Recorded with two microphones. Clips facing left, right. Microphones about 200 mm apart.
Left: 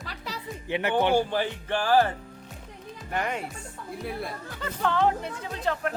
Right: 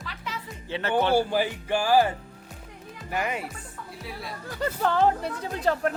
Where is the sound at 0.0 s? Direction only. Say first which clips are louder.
Even; 40° left (ahead or behind).